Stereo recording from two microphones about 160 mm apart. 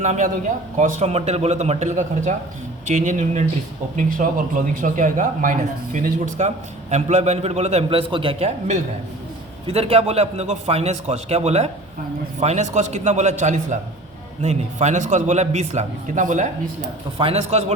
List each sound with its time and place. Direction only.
0.0 s a man's voice: 45° right (ahead or behind)
17.2 s a man's voice: 40° right (ahead or behind)